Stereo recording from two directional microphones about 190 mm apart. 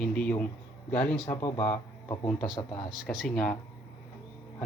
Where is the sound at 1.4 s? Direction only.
35° left (ahead or behind).